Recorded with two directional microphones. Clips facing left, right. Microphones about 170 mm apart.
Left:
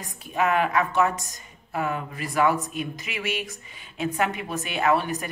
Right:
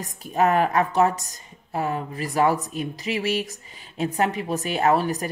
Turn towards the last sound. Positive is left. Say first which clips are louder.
# right 2 dB
turn(degrees=-35)  # may be behind; listen again after turning